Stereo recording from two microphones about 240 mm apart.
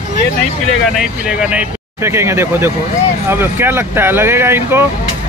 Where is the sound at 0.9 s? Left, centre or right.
Centre.